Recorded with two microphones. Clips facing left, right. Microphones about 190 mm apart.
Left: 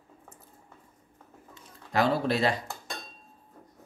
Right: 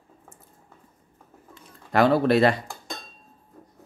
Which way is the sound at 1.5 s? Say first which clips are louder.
Right 7 dB; 60° right (ahead or behind).